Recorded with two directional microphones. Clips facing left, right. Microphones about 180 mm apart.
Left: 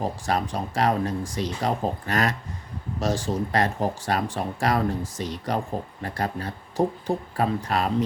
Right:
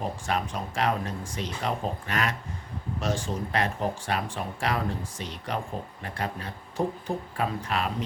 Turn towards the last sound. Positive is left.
turn(degrees=40)  # may be behind; listen again after turning